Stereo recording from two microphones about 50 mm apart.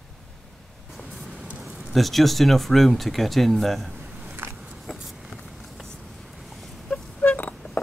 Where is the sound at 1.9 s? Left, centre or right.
Centre.